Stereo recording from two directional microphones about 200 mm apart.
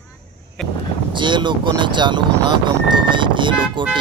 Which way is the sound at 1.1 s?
25° right (ahead or behind).